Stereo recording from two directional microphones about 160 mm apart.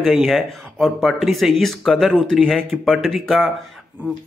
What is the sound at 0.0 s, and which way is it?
A man's voice, centre (ahead or behind).